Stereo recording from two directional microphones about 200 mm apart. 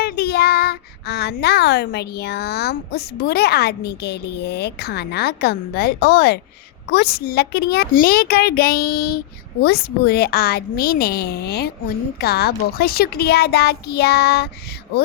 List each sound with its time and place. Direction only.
0.0 s a woman's voice: 50° left (ahead or behind)